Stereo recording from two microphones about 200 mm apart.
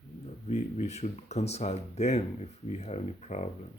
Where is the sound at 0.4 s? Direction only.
35° left (ahead or behind).